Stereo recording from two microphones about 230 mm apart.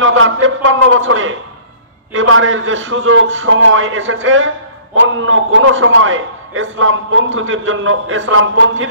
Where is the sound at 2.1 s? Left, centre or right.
Right.